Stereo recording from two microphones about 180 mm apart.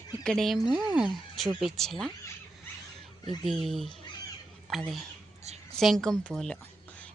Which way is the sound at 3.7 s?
Centre (ahead or behind).